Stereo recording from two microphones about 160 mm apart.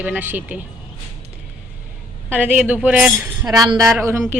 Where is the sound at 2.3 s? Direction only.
10° right (ahead or behind).